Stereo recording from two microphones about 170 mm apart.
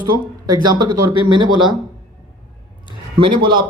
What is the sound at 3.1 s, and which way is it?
Speech, 30° right (ahead or behind).